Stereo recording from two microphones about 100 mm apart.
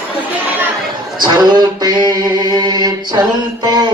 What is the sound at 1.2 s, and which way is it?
Mantra, 45° right (ahead or behind).